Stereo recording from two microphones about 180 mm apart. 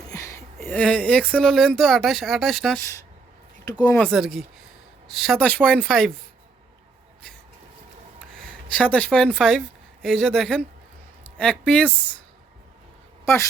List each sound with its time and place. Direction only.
0.1 s a woman's voice: 15° left (ahead or behind); by 2.8 s centre (ahead or behind)
3.7 s speech: 20° left (ahead or behind)
3.9 s speech: centre (ahead or behind)
8.4 s a woman's voice: 5° left (ahead or behind)
13.2 s a woman's voice: 15° left (ahead or behind)